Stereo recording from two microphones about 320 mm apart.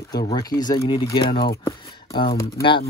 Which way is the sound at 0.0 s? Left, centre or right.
Centre.